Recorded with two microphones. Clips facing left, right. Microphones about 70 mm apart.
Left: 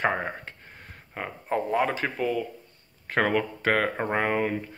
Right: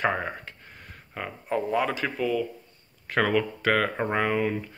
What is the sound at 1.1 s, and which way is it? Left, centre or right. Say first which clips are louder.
Speech: even; left.